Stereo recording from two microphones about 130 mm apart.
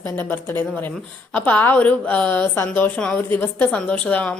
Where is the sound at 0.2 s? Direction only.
15° left (ahead or behind).